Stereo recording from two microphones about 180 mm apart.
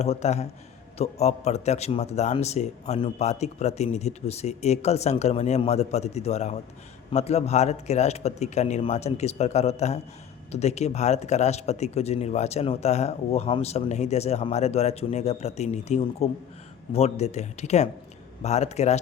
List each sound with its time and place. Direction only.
0.0 s a man's voice: 35° left (ahead or behind)